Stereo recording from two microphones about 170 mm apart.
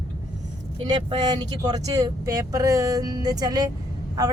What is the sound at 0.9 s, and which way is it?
A woman's voice, 25° right (ahead or behind).